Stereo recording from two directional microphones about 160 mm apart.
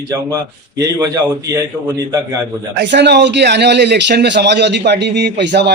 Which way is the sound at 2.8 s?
90° right.